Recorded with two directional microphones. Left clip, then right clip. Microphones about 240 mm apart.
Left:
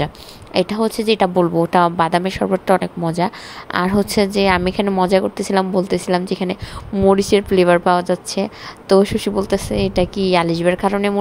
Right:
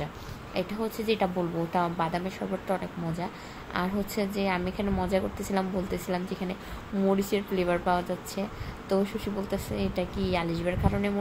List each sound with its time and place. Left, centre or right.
0.0 s a woman's voice: left